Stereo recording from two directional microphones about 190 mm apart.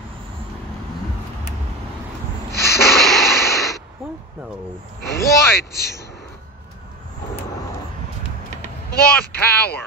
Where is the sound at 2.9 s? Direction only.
Centre (ahead or behind).